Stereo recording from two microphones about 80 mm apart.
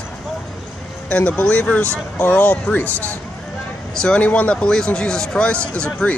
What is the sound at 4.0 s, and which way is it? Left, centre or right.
Speech, centre.